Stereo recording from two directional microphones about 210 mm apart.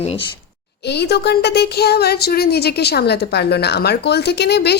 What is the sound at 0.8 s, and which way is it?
Speech, 50° left (ahead or behind).